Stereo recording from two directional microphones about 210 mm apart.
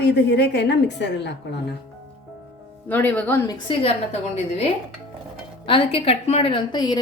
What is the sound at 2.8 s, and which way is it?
A woman's voice, 10° left (ahead or behind).